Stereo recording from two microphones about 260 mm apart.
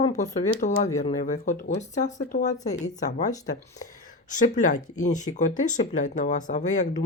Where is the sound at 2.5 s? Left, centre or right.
Centre.